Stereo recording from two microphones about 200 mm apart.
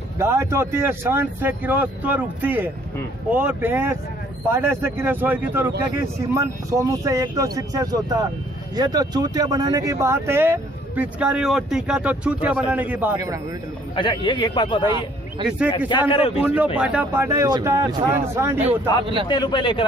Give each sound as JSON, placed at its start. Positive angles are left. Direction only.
{"t": 0.2, "sound": "speech", "side_deg": -15}
{"t": 13.9, "sound": "a man's voice", "side_deg": 25}
{"t": 16.1, "sound": "a man's voice", "side_deg": 30}
{"t": 16.7, "sound": "speech", "side_deg": -5}
{"t": 18.6, "sound": "speech", "side_deg": -30}
{"t": 19.2, "sound": "a man's voice", "side_deg": 20}